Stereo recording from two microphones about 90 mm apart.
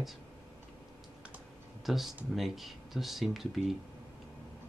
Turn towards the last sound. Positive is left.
turn(degrees=0)  # may be behind; listen again after turning